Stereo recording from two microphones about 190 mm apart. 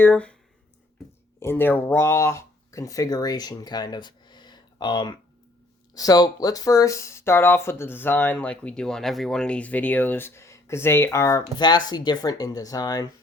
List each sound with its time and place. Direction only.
0.0 s speech: 10° left (ahead or behind)
1.4 s speech: 10° left (ahead or behind)